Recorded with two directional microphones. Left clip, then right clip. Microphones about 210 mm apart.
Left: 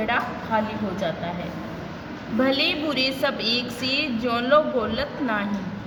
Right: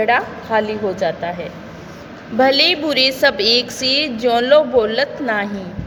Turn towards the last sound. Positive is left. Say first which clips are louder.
# right 7 dB
turn(degrees=-30)  # may be behind; listen again after turning